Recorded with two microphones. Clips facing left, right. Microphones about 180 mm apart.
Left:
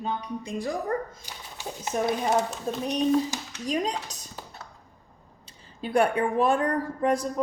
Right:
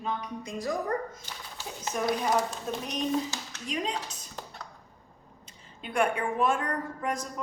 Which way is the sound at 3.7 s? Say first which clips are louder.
Left 4 dB; 40° left (ahead or behind).